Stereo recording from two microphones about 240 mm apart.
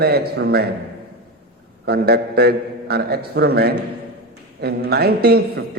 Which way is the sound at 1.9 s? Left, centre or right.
Right.